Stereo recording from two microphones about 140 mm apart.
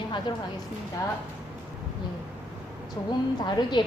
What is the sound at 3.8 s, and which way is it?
Speech, 35° left (ahead or behind).